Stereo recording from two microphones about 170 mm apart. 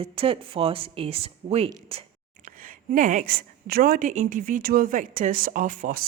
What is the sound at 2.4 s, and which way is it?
A woman's voice, 55° right (ahead or behind).